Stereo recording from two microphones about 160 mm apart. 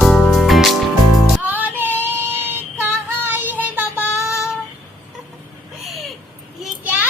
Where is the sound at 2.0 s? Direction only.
10° right (ahead or behind).